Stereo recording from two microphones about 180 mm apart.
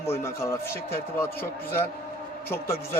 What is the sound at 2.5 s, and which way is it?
Speech, 15° left (ahead or behind).